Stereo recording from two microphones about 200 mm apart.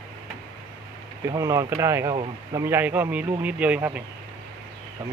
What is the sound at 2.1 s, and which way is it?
Speech, 25° right (ahead or behind).